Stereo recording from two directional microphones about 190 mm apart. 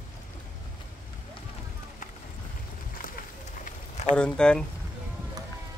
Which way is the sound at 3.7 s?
35° left (ahead or behind).